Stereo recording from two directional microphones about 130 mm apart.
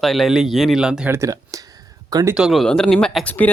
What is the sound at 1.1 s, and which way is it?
Speech, 25° right (ahead or behind).